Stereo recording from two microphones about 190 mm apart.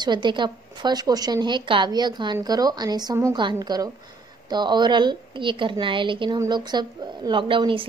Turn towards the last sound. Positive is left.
turn(degrees=-25)  # may be behind; listen again after turning